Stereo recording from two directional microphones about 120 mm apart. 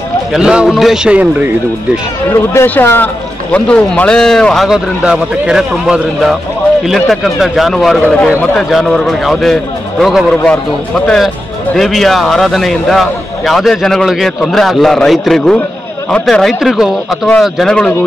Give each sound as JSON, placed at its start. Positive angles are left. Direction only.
{"t": 0.3, "sound": "a man's voice", "side_deg": -5}
{"t": 2.5, "sound": "a man's voice", "side_deg": 20}
{"t": 11.7, "sound": "a man's voice", "side_deg": 0}